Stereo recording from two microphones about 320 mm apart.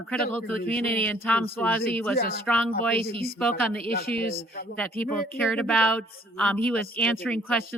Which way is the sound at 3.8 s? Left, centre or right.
Left.